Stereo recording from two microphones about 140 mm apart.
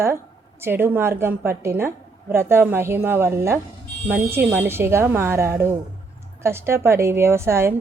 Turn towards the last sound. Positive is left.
turn(degrees=-20)  # may be behind; listen again after turning